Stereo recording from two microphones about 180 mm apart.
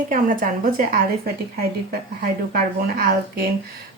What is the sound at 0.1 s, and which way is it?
Speech, 45° right (ahead or behind).